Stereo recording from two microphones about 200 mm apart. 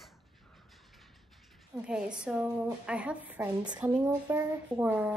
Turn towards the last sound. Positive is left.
turn(degrees=-5)  # may be behind; listen again after turning